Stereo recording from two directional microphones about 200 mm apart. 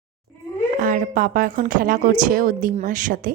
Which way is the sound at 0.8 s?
40° right (ahead or behind).